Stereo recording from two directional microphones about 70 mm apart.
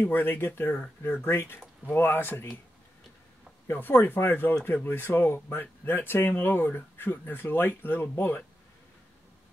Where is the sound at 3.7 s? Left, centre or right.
Left.